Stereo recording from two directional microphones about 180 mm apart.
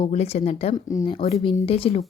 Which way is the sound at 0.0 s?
35° left (ahead or behind).